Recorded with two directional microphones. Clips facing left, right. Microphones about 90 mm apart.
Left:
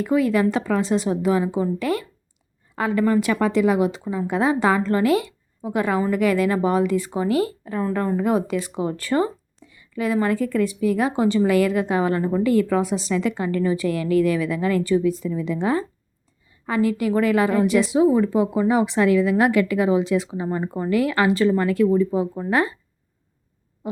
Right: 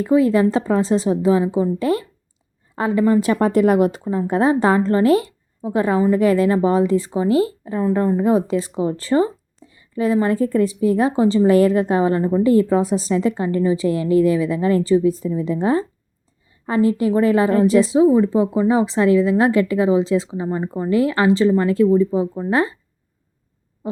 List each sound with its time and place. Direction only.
0.0 s a woman's voice: 30° right (ahead or behind)
3.4 s speech: 45° right (ahead or behind)
4.3 s a woman's voice: 40° right (ahead or behind)